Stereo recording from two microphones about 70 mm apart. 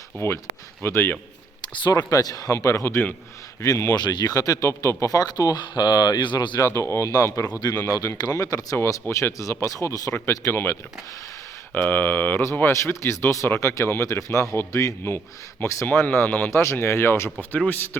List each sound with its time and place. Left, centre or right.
0.1 s speech: left
1.6 s speech: left
3.6 s speech: left
6.6 s speech: left
9.0 s speech: left
9.4 s speech: left
10.5 s speech: left
12.7 s speech: left
15.9 s speech: left
16.5 s speech: left